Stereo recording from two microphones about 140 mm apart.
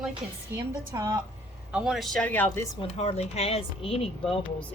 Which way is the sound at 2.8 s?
45° left (ahead or behind).